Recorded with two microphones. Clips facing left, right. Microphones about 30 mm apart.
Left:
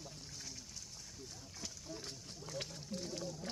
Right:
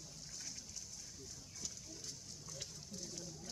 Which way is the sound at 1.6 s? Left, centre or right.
Left.